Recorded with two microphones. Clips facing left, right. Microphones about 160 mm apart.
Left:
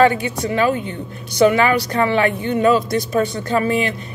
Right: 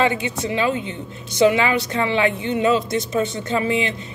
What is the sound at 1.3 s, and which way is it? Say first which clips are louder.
Speech: left 2 dB; 25° right (ahead or behind).